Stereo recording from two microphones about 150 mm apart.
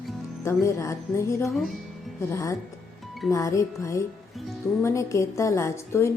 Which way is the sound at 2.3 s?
20° left (ahead or behind).